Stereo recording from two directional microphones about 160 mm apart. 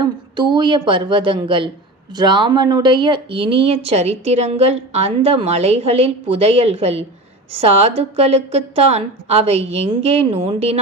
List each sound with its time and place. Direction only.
0.0 s speech: 30° right (ahead or behind)